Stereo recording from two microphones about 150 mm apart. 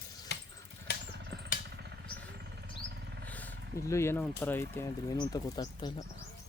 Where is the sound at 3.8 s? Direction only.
20° left (ahead or behind).